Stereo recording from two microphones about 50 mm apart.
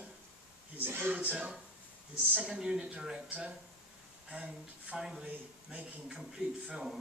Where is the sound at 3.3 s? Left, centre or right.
Right.